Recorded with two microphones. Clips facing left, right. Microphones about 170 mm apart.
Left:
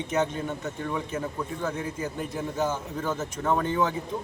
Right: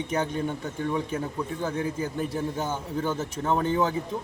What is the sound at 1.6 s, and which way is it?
A man's voice, 30° right (ahead or behind).